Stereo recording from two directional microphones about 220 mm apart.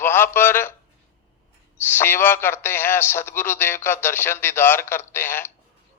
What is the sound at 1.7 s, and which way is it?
A man's voice, 10° left (ahead or behind).